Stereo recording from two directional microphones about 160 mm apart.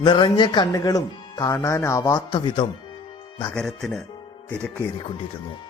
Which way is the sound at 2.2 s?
30° left (ahead or behind).